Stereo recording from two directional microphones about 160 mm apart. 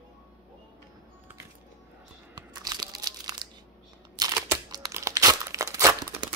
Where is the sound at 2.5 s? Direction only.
25° right (ahead or behind).